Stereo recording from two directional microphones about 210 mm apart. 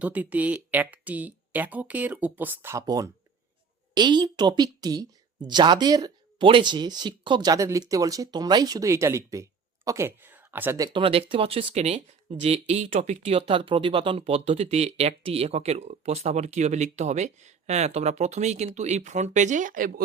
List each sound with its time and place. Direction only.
0.0 s a woman's voice: 5° right (ahead or behind); by 19.9 s 40° right (ahead or behind)